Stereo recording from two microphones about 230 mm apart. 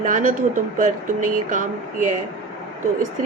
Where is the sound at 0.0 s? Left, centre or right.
Right.